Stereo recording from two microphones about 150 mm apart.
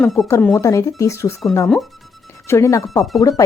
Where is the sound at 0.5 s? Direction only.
20° left (ahead or behind).